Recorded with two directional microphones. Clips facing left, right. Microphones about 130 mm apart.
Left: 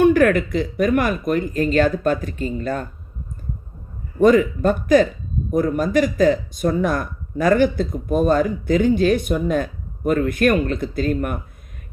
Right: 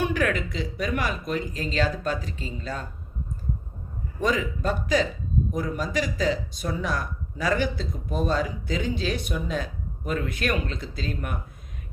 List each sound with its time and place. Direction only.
0.0 s speech: 50° left (ahead or behind)
4.2 s speech: 50° left (ahead or behind)